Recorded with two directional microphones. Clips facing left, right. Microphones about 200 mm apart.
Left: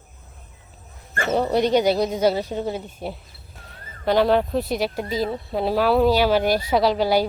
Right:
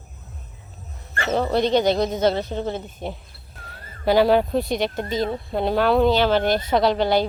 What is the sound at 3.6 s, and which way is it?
Speech, 5° right (ahead or behind).